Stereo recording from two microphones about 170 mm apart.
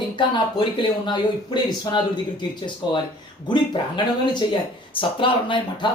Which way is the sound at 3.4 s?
25° left (ahead or behind).